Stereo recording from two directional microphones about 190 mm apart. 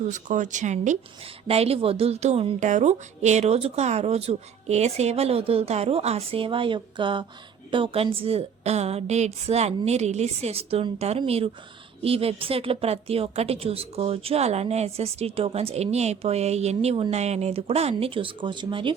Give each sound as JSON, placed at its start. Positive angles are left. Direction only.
{"t": 0.0, "sound": "a woman's voice", "side_deg": -40}